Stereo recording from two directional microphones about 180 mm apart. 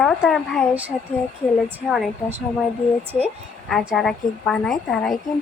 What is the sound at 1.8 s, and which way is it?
Speech, 5° right (ahead or behind).